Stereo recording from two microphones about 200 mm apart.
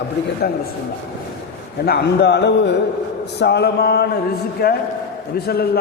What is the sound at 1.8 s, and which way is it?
A man's voice, 55° left (ahead or behind).